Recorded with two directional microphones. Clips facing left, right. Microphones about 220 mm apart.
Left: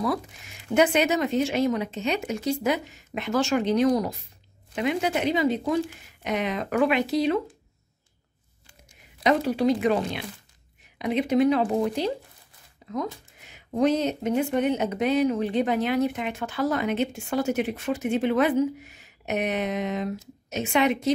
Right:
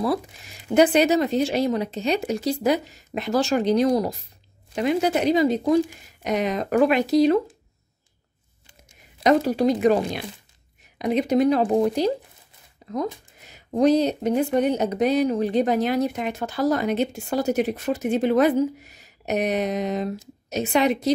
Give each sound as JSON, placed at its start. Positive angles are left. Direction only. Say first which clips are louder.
{"t": 0.0, "sound": "speech", "louder": "right 3 dB", "side_deg": -35}
{"t": 9.2, "sound": "speech", "louder": "right 3 dB", "side_deg": -40}
{"t": 12.8, "sound": "a sound", "louder": "right 3 dB", "side_deg": -40}
{"t": 13.4, "sound": "speech", "louder": "right 3 dB", "side_deg": -40}